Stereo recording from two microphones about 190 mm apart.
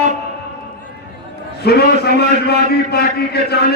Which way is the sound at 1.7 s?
60° left (ahead or behind).